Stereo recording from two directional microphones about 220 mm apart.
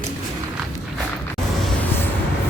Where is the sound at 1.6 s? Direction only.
5° left (ahead or behind).